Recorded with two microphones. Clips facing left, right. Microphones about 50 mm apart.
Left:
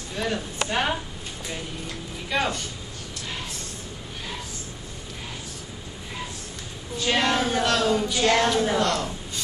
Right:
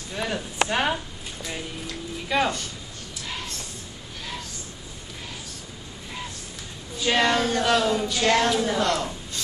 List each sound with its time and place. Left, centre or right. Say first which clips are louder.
0.2 s a woman's voice: right 1 dB; centre
2.2 s speech: right 2 dB; centre
7.0 s a woman's voice: right 1 dB; centre